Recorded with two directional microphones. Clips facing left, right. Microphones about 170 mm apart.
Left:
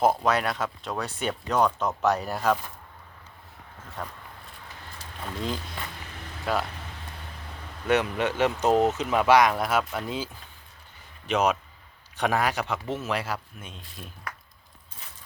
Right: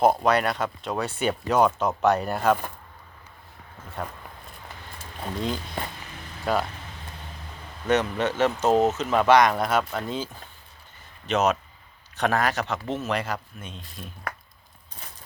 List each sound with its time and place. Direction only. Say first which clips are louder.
0.0 s speech: right 3 dB; centre (ahead or behind)
4.0 s speech: right 3 dB; 5° right (ahead or behind)
6.4 s speech: right 3 dB; centre (ahead or behind)
7.9 s speech: right 1 dB; 10° left (ahead or behind)
8.7 s speech: right 1 dB; 20° right (ahead or behind)
9.0 s speech: right 1 dB; 10° left (ahead or behind)
11.3 s speech: right 1 dB; 10° left (ahead or behind)